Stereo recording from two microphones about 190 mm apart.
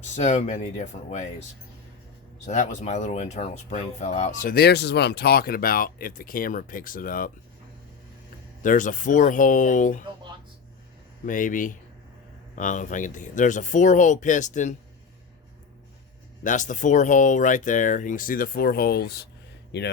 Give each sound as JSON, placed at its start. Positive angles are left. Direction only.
{"t": 0.0, "sound": "speech", "side_deg": 35}
{"t": 2.4, "sound": "speech", "side_deg": 40}
{"t": 8.6, "sound": "speech", "side_deg": 45}
{"t": 11.3, "sound": "speech", "side_deg": 45}
{"t": 16.4, "sound": "speech", "side_deg": 40}